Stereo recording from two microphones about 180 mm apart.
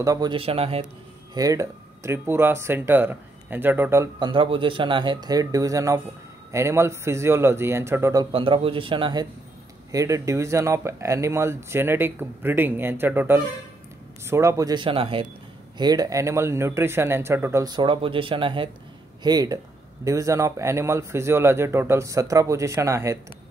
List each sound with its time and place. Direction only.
0.0 s a man's voice: 20° right (ahead or behind)
1.3 s speech: 20° right (ahead or behind)
4.3 s speech: 30° right (ahead or behind)
8.3 s speech: 30° right (ahead or behind)